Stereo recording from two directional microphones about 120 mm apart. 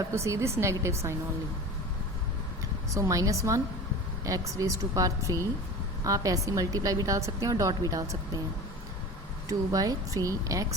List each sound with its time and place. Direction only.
0.0 s speech: 25° right (ahead or behind)
2.9 s speech: 30° right (ahead or behind)
9.5 s a woman's voice: 30° right (ahead or behind)